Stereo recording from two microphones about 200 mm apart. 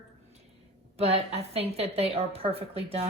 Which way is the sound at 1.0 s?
30° right (ahead or behind).